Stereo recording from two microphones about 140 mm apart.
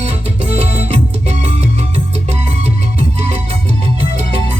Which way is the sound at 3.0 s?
50° right (ahead or behind).